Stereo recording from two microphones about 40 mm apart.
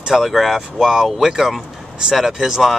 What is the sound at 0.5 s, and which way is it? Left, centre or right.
Speech, centre.